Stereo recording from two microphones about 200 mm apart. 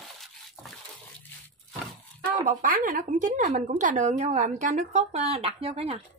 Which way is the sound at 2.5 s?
40° right (ahead or behind).